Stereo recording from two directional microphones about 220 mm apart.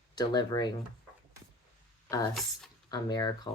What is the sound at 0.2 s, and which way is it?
Speech, 15° left (ahead or behind).